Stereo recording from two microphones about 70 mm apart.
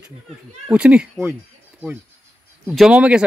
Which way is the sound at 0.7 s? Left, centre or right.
Centre.